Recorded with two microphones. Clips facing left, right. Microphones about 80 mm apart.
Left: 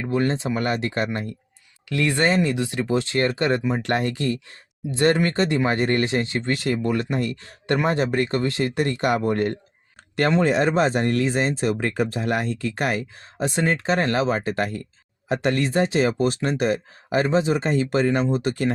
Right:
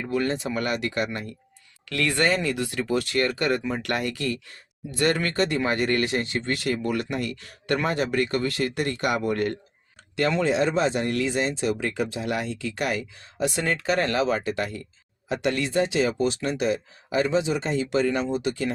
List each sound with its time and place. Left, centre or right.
0.1 s speech: left
1.9 s speech: left
10.4 s speech: left